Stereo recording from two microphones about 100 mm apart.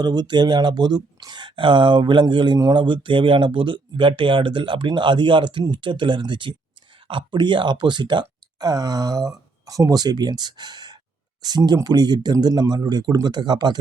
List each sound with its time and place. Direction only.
0.0 s speech: 45° right (ahead or behind)